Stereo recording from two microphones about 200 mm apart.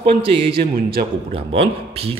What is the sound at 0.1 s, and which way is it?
Speech, 25° right (ahead or behind).